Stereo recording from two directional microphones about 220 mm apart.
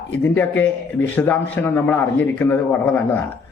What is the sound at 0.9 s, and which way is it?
A man's voice, 10° left (ahead or behind).